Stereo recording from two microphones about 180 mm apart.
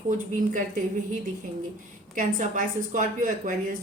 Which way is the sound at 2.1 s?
45° right (ahead or behind).